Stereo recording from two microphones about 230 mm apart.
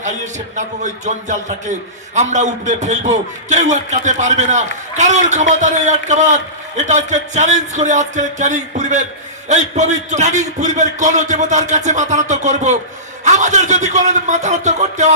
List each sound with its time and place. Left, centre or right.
0.0 s a man's voice: right